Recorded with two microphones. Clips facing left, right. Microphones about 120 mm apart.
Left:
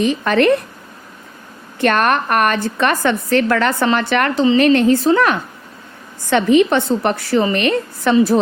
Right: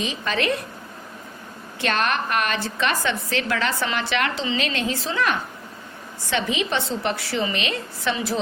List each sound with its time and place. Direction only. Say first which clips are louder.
0.0 s a woman's voice: left 11 dB; 55° left (ahead or behind)
1.8 s a woman's voice: left 8 dB; 50° left (ahead or behind)